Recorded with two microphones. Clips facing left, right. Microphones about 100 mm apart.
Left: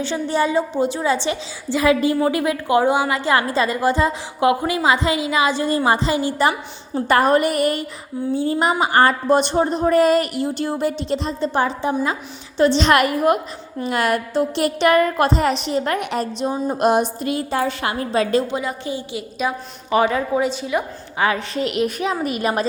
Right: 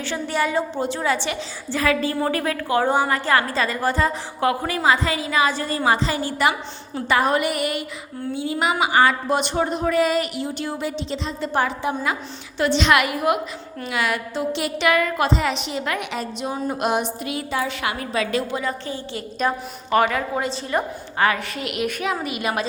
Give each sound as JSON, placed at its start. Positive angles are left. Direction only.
{"t": 0.0, "sound": "a woman's voice", "side_deg": 25}
{"t": 7.1, "sound": "a woman's voice", "side_deg": 45}
{"t": 10.6, "sound": "a sound", "side_deg": 40}
{"t": 11.3, "sound": "a woman's voice", "side_deg": 25}
{"t": 13.8, "sound": "a sound", "side_deg": 45}
{"t": 15.6, "sound": "a woman's voice", "side_deg": 40}
{"t": 16.5, "sound": "a woman's voice", "side_deg": 20}
{"t": 16.7, "sound": "a woman's voice", "side_deg": 40}
{"t": 18.5, "sound": "a woman's voice", "side_deg": 15}
{"t": 20.0, "sound": "a woman's voice", "side_deg": 20}
{"t": 20.5, "sound": "a woman's voice", "side_deg": 5}
{"t": 21.2, "sound": "a woman's voice", "side_deg": 25}